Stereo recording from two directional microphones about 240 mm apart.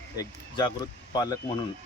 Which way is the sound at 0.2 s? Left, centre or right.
Centre.